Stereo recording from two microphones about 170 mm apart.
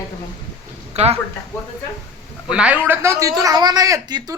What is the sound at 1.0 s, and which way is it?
Speech, 40° right (ahead or behind).